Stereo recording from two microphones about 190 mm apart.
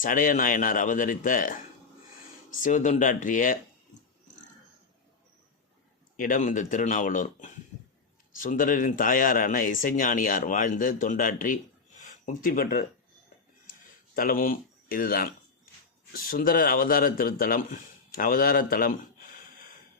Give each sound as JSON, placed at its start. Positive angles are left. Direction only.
{"t": 0.0, "sound": "speech", "side_deg": 45}
{"t": 6.1, "sound": "speech", "side_deg": 45}
{"t": 14.2, "sound": "speech", "side_deg": 50}